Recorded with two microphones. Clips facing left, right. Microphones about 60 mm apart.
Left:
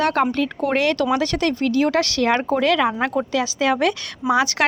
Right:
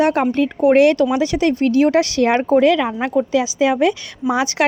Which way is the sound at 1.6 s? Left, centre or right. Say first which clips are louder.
Right 5 dB; right.